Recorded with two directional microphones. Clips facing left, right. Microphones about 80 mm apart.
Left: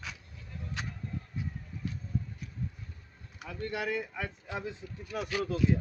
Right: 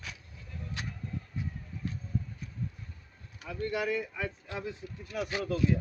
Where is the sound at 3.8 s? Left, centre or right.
Left.